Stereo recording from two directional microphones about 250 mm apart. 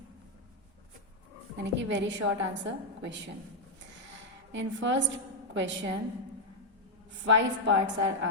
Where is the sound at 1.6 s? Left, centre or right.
Right.